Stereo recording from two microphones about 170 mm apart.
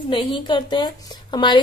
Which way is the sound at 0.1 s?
30° left (ahead or behind).